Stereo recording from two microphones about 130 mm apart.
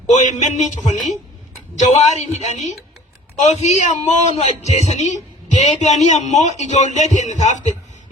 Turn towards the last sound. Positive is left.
turn(degrees=60)  # may be behind; listen again after turning